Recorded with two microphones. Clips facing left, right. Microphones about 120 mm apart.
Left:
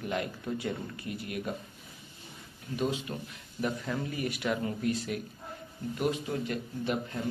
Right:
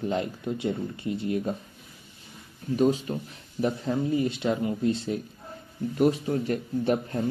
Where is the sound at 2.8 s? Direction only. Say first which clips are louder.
Right 8 dB; 35° right (ahead or behind).